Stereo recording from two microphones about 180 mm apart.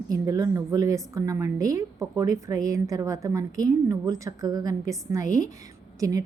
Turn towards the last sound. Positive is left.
turn(degrees=-20)  # may be behind; listen again after turning